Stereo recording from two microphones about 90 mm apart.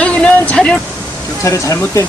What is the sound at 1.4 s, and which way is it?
Speech, 35° left (ahead or behind).